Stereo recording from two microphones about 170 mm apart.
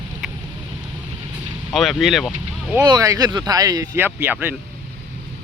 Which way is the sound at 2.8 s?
20° right (ahead or behind).